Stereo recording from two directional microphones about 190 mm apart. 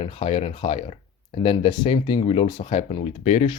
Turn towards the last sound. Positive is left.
turn(degrees=35)  # may be behind; listen again after turning